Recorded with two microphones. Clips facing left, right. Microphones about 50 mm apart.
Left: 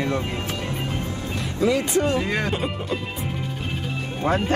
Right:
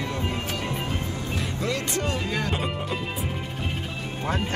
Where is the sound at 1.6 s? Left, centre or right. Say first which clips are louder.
Left 9 dB; centre.